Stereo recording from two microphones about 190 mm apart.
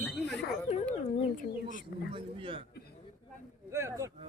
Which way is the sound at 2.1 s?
25° right (ahead or behind).